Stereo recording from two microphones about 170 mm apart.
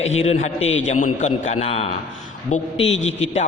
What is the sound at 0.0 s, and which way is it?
A man's voice, 40° left (ahead or behind).